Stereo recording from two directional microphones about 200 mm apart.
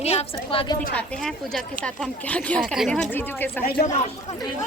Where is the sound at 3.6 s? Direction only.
50° left (ahead or behind).